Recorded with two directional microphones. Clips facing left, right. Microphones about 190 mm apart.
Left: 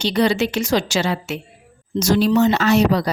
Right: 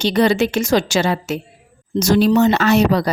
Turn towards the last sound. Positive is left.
turn(degrees=-55)  # may be behind; listen again after turning